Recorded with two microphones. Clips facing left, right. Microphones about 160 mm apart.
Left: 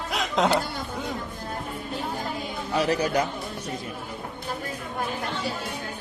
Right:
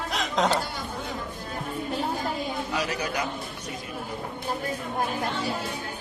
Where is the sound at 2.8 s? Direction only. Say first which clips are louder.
Left 10 dB; 35° left (ahead or behind).